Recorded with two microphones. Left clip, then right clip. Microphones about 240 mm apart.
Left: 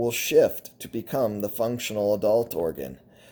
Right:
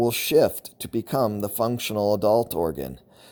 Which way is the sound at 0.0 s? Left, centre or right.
Right.